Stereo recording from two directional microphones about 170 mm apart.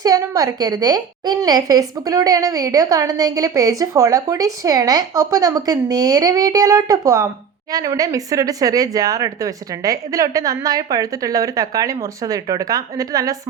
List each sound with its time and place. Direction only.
0.0 s a woman's voice: 20° right (ahead or behind)